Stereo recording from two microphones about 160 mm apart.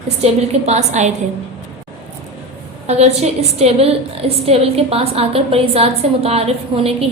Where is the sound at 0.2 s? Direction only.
45° right (ahead or behind).